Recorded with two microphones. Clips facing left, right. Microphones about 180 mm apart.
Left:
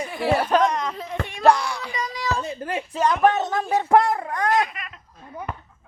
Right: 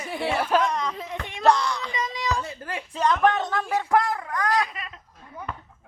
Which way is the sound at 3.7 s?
25° left (ahead or behind).